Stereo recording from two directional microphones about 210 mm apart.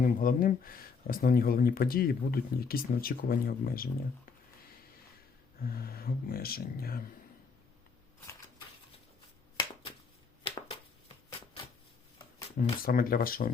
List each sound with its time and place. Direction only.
0.0 s speech: 40° left (ahead or behind)
5.6 s speech: 45° left (ahead or behind)
11.3 s shuffling cards: 25° left (ahead or behind)
12.5 s speech: 40° left (ahead or behind)